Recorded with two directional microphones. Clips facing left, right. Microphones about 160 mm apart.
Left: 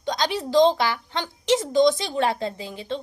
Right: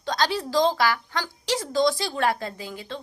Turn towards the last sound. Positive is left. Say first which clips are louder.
# left 4 dB
turn(degrees=20)  # may be behind; listen again after turning